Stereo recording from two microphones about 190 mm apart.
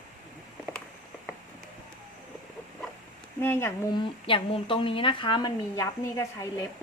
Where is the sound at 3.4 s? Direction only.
10° left (ahead or behind).